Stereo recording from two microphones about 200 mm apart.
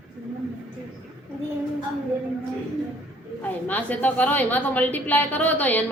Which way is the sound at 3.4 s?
10° left (ahead or behind).